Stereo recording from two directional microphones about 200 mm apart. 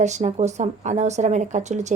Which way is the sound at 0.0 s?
35° right (ahead or behind).